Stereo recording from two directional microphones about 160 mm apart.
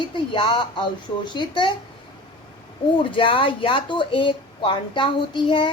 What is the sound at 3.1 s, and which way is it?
Speech, 35° left (ahead or behind).